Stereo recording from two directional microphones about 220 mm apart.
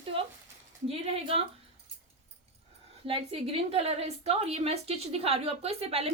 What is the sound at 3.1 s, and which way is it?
A woman's voice, 25° right (ahead or behind).